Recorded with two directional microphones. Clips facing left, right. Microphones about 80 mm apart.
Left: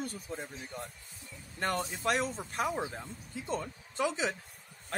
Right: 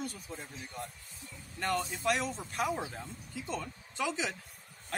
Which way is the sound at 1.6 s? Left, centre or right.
Left.